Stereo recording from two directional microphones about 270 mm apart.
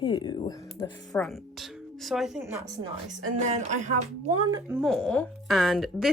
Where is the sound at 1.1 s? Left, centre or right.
Centre.